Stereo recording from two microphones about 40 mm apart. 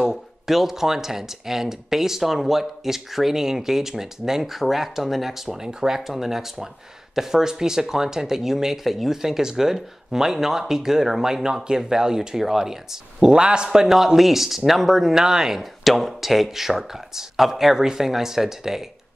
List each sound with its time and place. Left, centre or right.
0.0 s speech: centre
13.4 s a man's voice: right
13.8 s speech: centre
15.6 s speech: centre